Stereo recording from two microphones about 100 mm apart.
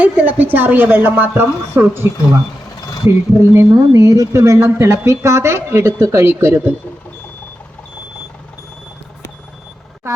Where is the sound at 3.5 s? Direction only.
30° right (ahead or behind).